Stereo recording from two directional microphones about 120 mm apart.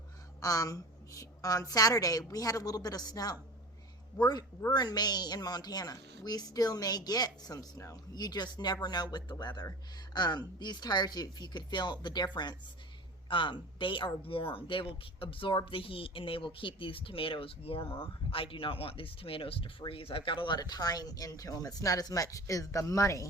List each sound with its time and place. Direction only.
0.3 s a woman's voice: 30° left (ahead or behind)